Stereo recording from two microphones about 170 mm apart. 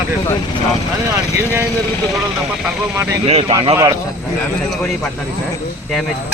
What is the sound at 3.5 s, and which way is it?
Speech, 25° right (ahead or behind).